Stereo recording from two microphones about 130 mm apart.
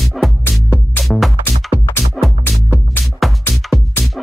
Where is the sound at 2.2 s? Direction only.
Centre (ahead or behind).